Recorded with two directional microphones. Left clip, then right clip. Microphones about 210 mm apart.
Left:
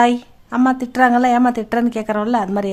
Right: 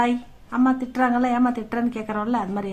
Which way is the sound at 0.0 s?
40° left (ahead or behind).